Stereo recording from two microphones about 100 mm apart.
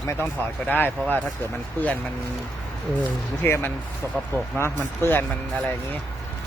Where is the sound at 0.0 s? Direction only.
25° left (ahead or behind).